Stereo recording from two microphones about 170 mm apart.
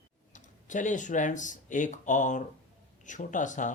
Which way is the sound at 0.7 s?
50° left (ahead or behind).